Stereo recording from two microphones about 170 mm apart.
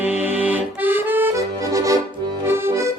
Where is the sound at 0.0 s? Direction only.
10° right (ahead or behind).